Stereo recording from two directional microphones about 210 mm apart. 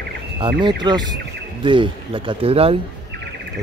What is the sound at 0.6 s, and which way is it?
Speech, 20° right (ahead or behind).